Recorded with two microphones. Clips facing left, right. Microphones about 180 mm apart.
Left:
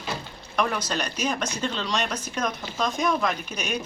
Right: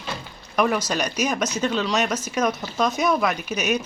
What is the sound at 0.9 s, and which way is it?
Speech, 10° right (ahead or behind).